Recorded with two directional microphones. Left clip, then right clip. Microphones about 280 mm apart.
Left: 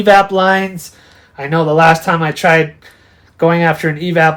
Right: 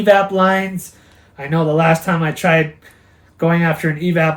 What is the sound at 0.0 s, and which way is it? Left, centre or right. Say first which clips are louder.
Speech: left 3 dB; left.